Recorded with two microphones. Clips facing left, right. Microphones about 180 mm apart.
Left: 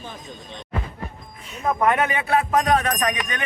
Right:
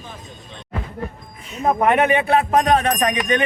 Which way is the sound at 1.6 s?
25° right (ahead or behind).